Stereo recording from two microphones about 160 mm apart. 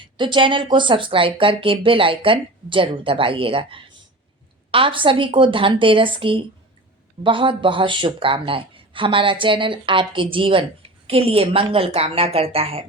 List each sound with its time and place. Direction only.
0.0 s speech: 30° right (ahead or behind)